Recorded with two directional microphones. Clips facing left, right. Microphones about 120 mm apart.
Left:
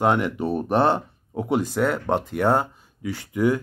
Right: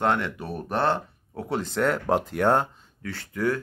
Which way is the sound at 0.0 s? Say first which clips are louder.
Left 4 dB; 15° left (ahead or behind).